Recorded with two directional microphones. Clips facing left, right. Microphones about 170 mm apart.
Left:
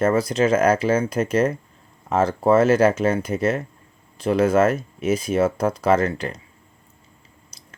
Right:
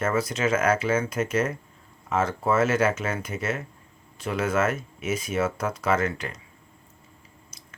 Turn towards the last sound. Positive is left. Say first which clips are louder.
# even
turn(degrees=35)  # may be behind; listen again after turning